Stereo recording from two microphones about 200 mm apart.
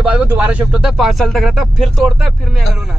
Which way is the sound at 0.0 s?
10° right (ahead or behind).